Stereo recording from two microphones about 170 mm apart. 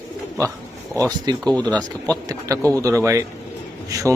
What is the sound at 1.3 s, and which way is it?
Speech, 25° right (ahead or behind).